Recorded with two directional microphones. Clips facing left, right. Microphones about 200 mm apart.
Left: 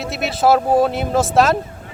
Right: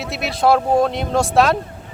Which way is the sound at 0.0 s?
Centre (ahead or behind).